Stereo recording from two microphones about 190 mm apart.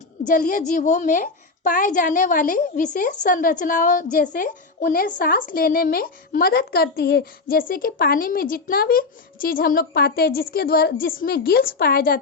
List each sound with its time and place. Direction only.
0.3 s a woman's voice: 45° left (ahead or behind)